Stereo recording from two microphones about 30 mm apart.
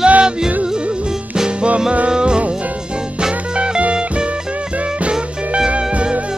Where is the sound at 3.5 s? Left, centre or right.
Right.